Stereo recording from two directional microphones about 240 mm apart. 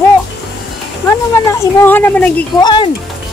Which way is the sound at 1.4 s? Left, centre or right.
Centre.